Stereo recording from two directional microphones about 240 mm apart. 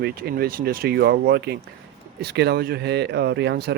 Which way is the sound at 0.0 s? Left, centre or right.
Right.